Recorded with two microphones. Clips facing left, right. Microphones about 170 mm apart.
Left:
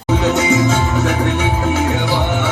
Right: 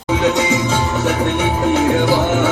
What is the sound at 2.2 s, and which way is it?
Music, 40° right (ahead or behind).